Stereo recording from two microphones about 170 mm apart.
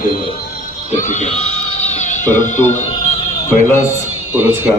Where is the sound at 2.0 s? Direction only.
45° left (ahead or behind).